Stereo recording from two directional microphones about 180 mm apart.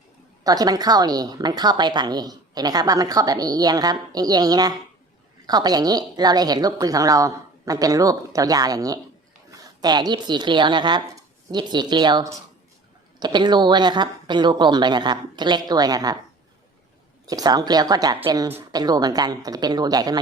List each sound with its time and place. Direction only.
0.4 s a woman's voice: 20° right (ahead or behind)
17.2 s a woman's voice: 20° right (ahead or behind)